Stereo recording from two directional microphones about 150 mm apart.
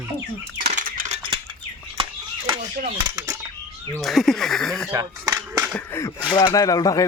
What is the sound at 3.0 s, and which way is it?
Speech, 25° right (ahead or behind).